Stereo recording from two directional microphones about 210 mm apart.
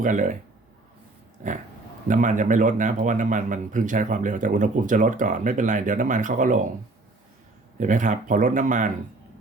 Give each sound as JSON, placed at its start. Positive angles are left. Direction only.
{"t": 0.0, "sound": "a man's voice", "side_deg": -35}
{"t": 1.4, "sound": "dog", "side_deg": -35}
{"t": 2.0, "sound": "a man's voice", "side_deg": -35}
{"t": 7.8, "sound": "a man's voice", "side_deg": -35}